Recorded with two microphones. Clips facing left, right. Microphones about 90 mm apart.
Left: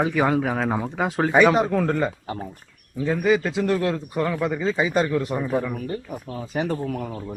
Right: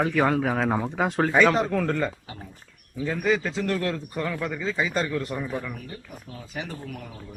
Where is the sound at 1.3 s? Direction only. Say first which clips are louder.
Left 5 dB; 15° left (ahead or behind).